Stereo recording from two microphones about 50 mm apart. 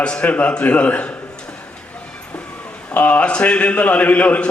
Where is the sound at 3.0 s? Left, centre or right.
Left.